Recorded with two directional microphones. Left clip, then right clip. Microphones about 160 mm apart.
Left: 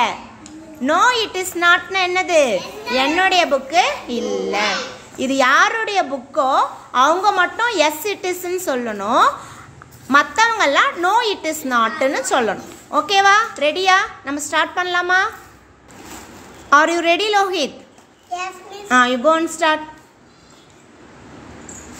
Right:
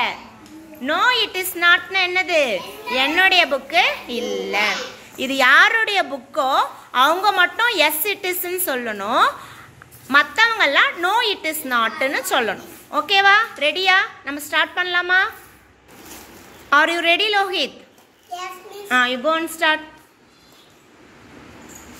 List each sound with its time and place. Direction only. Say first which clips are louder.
0.8 s a woman's voice: left 2 dB; 25° left (ahead or behind)
16.6 s a woman's voice: left 2 dB; 15° left (ahead or behind)
18.9 s speech: left 4 dB; 20° left (ahead or behind)